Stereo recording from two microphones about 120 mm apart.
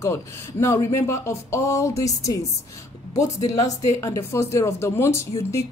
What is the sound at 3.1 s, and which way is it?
Speech, 70° left (ahead or behind).